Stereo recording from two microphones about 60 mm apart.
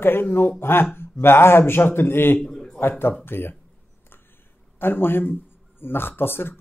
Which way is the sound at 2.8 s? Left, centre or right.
Left.